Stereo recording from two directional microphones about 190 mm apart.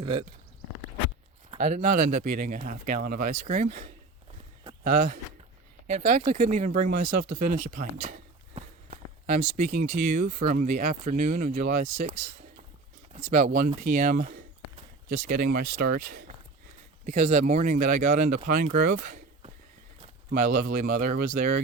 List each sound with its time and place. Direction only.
1.6 s speech: 40° right (ahead or behind)
17.1 s speech: 35° right (ahead or behind)